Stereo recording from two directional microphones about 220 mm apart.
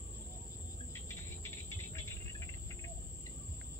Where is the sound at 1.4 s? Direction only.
10° left (ahead or behind).